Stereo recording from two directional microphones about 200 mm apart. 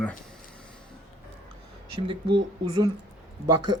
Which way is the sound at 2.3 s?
20° right (ahead or behind).